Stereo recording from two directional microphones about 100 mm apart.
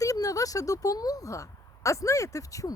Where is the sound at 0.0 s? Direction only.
35° left (ahead or behind).